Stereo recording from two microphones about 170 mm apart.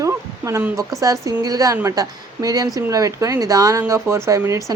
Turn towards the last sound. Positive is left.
turn(degrees=-15)  # may be behind; listen again after turning